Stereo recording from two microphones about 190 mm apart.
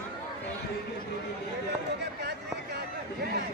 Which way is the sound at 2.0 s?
60° right (ahead or behind).